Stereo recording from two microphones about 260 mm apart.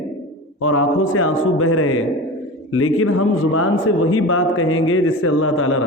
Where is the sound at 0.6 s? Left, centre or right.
Left.